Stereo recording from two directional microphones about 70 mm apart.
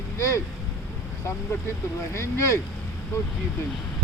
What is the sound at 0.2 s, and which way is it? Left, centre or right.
Speech, left.